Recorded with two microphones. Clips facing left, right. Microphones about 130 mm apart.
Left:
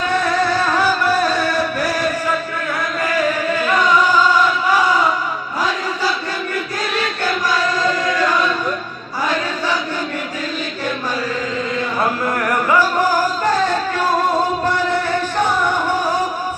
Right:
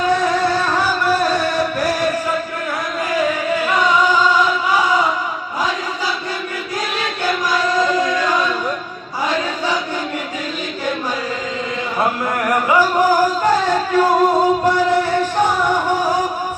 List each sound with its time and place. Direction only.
12.5 s music: 15° right (ahead or behind)